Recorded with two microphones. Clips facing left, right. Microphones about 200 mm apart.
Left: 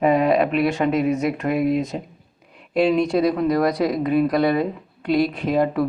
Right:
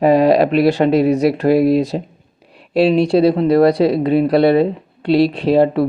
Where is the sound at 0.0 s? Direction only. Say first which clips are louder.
Right 6 dB; 35° right (ahead or behind).